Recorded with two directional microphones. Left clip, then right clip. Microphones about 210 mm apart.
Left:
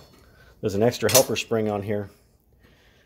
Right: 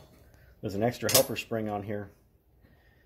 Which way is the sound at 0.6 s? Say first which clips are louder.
Left 8 dB; 35° left (ahead or behind).